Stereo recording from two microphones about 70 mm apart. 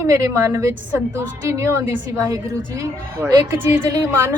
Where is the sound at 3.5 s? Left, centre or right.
Right.